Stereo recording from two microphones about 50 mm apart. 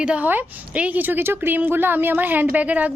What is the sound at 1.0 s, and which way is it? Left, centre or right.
Speech, right.